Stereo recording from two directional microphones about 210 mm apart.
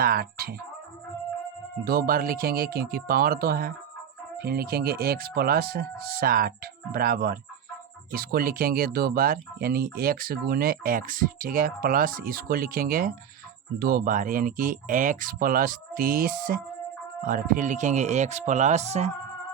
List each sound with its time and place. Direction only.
0.0 s speech: 45° right (ahead or behind)
1.8 s speech: 45° right (ahead or behind)